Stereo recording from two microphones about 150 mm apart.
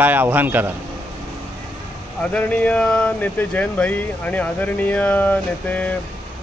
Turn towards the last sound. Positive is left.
turn(degrees=10)  # may be behind; listen again after turning